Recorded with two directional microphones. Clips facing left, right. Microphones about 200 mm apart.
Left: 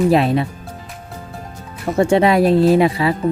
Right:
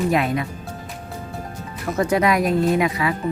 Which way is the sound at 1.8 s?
30° left (ahead or behind).